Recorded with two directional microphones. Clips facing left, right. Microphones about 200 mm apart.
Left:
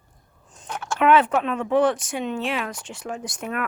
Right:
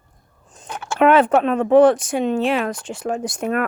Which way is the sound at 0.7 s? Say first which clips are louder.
Right 1 dB; 5° right (ahead or behind).